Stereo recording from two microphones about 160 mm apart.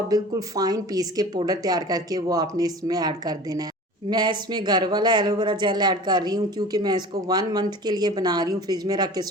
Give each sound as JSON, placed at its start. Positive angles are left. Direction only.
{"t": 0.1, "sound": "speech", "side_deg": -25}